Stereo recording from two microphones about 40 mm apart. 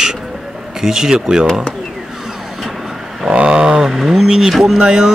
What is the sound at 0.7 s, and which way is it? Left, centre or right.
Speech, centre.